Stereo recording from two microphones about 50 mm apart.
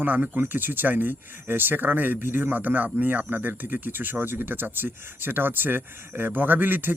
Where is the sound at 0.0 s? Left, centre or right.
Right.